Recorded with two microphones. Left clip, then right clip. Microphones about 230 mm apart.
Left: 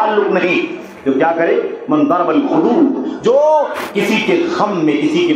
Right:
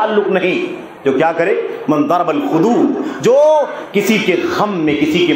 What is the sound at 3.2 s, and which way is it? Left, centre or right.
Speech, right.